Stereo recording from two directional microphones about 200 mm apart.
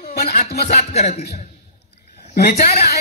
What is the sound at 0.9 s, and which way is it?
Speech, 35° left (ahead or behind).